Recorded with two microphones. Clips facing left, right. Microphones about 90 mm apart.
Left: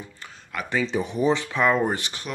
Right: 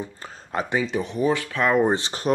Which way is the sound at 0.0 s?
35° right (ahead or behind).